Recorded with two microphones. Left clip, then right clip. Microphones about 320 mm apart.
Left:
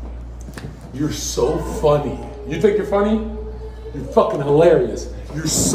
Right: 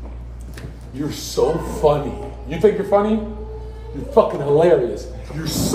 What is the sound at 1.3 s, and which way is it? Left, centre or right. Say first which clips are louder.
A man's voice: right 2 dB; centre.